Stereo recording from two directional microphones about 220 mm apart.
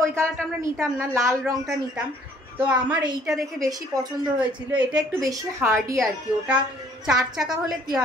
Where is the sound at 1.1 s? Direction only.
10° right (ahead or behind).